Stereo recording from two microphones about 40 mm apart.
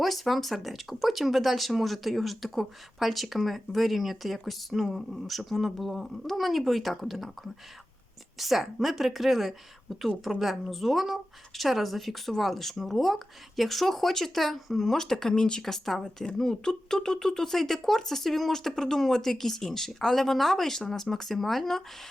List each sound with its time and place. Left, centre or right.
0.0 s speech: centre
8.4 s speech: centre